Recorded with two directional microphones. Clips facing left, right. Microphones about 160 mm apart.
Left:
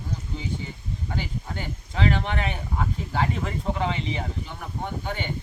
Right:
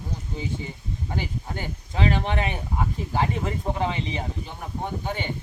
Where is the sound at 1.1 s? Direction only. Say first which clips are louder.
Right 1 dB; 15° right (ahead or behind).